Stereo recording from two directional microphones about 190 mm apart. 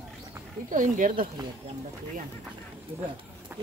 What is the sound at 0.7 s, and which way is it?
Speech, 40° right (ahead or behind).